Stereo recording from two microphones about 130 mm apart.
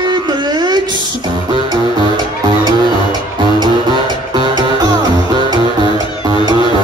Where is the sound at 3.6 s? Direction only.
35° right (ahead or behind).